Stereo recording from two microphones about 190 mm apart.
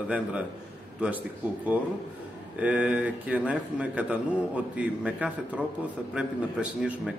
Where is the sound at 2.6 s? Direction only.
5° right (ahead or behind).